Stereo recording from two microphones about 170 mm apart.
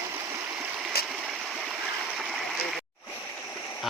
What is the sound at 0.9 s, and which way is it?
Stream, 65° left (ahead or behind).